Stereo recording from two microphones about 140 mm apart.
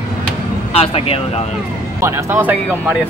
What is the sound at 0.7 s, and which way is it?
Speech, 45° left (ahead or behind).